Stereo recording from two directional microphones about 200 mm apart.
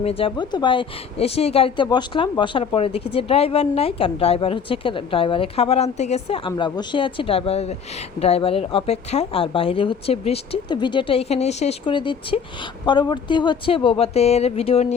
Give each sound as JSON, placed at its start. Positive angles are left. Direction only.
{"t": 0.0, "sound": "speech", "side_deg": 30}